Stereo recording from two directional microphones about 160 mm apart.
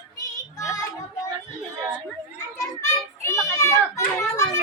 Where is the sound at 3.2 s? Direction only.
20° left (ahead or behind).